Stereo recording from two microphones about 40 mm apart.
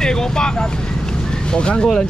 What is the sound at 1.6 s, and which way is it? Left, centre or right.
Speech, left.